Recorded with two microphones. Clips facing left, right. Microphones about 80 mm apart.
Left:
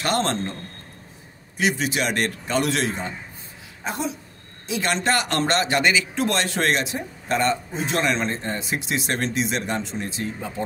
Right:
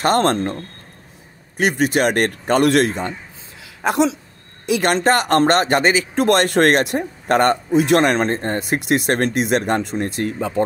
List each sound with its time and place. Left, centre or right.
0.0 s speech: right
1.6 s speech: right
3.8 s speech: right
4.6 s speech: right
6.1 s speech: right